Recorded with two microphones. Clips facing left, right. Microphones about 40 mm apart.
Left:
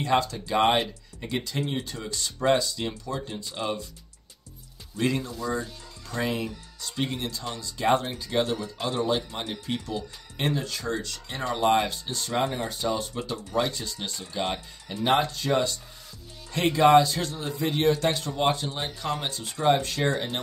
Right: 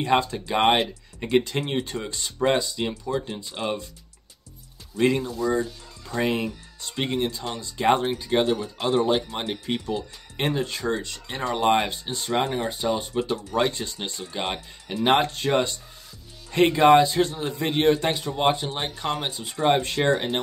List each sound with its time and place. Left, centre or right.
0.0 s speech: right
3.5 s speech: right
4.9 s speech: centre
6.2 s speech: right
13.2 s speech: right
18.0 s speech: centre
18.7 s speech: right
19.3 s speech: centre
19.6 s speech: right